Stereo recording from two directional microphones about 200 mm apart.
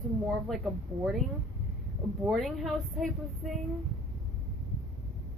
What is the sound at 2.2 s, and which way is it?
Speech, 5° right (ahead or behind).